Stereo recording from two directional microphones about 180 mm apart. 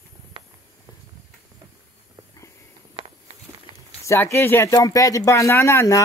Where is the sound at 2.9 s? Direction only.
30° right (ahead or behind).